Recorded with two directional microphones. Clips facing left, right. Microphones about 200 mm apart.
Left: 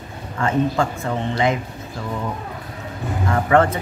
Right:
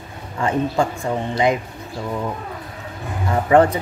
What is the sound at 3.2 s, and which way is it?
Speech, 15° right (ahead or behind).